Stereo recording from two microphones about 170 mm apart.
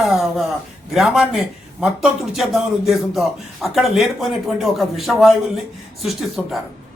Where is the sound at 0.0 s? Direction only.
Centre (ahead or behind).